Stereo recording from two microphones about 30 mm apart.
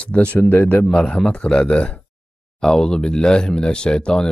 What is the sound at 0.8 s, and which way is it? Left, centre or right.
Speech, left.